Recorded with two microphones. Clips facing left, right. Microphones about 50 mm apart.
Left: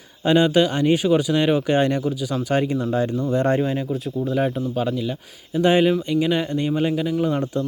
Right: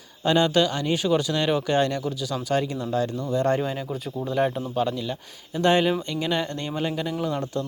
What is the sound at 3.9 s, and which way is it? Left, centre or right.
Speech, centre.